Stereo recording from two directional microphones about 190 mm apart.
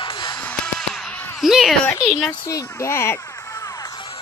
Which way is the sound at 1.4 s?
Centre (ahead or behind).